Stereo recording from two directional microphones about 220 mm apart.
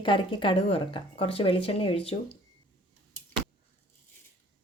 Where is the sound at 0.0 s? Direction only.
20° left (ahead or behind).